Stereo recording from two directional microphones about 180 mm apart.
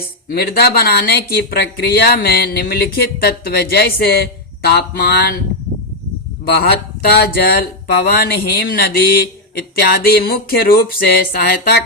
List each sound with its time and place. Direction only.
0.3 s speech: 60° left (ahead or behind)
6.6 s speech: 60° left (ahead or behind)